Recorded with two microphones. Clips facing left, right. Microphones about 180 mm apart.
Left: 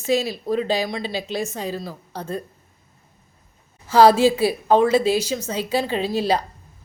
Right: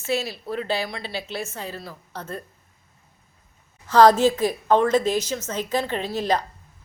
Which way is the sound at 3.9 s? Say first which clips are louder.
Left 1 dB; 10° left (ahead or behind).